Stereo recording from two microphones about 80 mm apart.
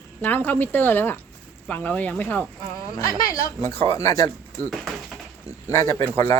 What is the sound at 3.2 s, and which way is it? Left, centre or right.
Speech, left.